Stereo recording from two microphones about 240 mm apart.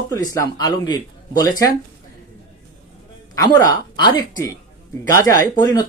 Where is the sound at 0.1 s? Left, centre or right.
Centre.